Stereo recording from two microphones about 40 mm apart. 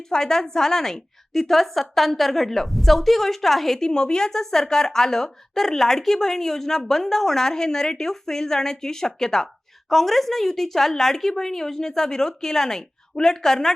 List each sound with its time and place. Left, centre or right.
0.1 s speech: centre
3.8 s speech: centre